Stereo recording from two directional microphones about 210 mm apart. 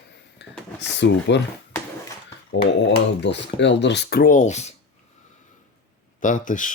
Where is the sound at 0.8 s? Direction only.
55° left (ahead or behind).